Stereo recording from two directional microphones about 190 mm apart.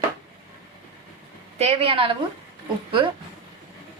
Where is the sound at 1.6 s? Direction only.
35° right (ahead or behind).